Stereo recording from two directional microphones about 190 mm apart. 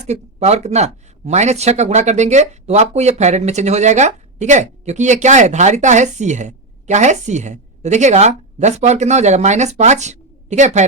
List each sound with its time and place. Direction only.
0.1 s speech: 35° right (ahead or behind)